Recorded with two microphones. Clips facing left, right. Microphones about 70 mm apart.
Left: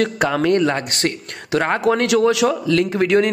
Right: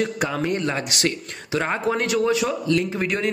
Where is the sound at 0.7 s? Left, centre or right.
Left.